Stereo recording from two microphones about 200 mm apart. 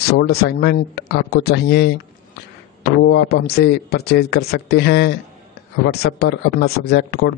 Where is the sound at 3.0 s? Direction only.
65° left (ahead or behind).